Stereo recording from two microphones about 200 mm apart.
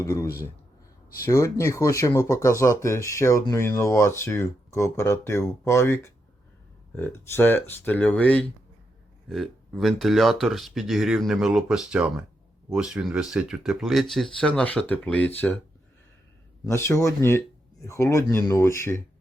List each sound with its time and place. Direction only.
0.0 s speech: 15° left (ahead or behind)
16.6 s speech: 15° left (ahead or behind)